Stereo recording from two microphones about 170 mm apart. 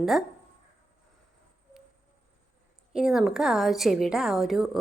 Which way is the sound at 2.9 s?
5° right (ahead or behind).